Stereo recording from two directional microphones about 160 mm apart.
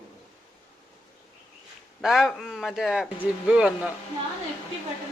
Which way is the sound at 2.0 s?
Centre (ahead or behind).